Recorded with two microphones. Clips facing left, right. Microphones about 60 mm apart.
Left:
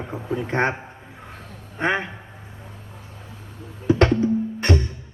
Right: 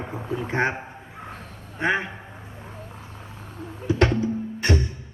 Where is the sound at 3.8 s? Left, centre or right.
Left.